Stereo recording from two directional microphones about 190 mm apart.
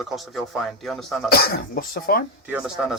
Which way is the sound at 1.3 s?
55° left (ahead or behind).